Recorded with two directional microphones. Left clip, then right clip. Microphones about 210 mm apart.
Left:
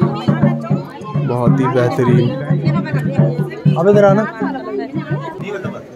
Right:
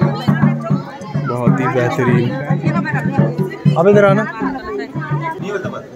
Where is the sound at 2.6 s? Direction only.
25° right (ahead or behind).